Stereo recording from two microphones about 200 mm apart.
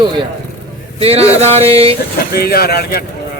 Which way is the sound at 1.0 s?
30° right (ahead or behind).